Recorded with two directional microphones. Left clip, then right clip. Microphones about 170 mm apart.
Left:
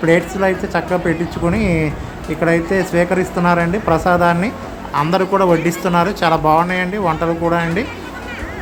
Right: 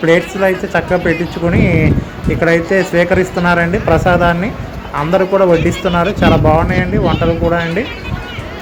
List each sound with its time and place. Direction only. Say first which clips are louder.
0.0 s a man's voice: right 3 dB; 5° right (ahead or behind)